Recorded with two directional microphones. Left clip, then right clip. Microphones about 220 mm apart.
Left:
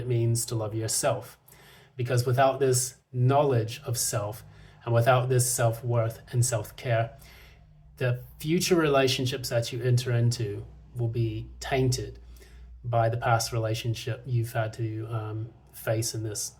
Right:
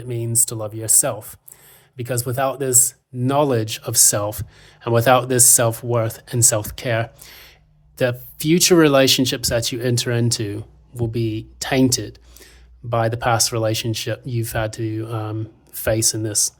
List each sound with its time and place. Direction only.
0.1 s speech: 50° right (ahead or behind)